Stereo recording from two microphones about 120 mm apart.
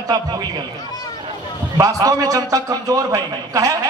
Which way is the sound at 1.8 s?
30° right (ahead or behind).